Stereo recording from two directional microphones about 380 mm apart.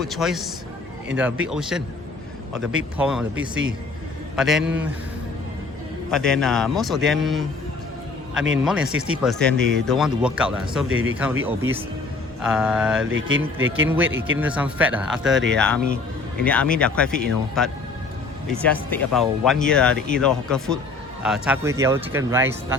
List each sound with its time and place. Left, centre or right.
0.0 s speech: centre
3.0 s speech: centre
6.1 s speech: centre
8.6 s speech: centre
10.8 s speech: right
11.4 s speech: centre
13.1 s speech: right
13.8 s a man's voice: centre